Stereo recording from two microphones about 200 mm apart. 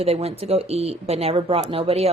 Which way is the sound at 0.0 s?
30° right (ahead or behind).